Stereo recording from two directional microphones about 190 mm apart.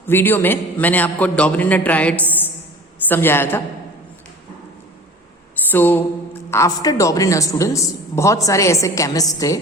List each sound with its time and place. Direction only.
0.0 s a man's voice: 10° left (ahead or behind)
5.7 s a man's voice: 10° left (ahead or behind)